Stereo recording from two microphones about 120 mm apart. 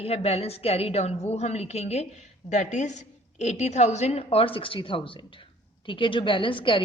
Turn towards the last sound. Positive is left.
turn(degrees=45)  # may be behind; listen again after turning